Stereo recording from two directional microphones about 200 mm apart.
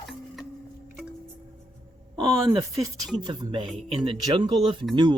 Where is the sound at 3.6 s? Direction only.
Centre (ahead or behind).